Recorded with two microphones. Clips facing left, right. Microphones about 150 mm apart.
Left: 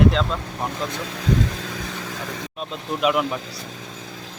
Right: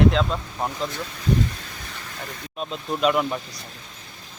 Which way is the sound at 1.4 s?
90° left.